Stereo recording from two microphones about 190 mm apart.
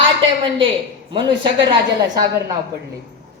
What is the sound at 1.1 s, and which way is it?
Speech, 25° right (ahead or behind).